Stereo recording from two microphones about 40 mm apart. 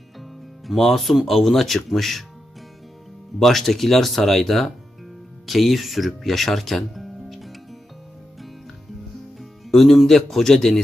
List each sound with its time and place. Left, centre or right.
0.8 s speech: centre
3.4 s speech: centre
9.4 s speech: centre